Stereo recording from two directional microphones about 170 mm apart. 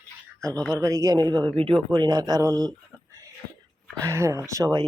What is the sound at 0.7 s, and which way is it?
Speech, 20° right (ahead or behind).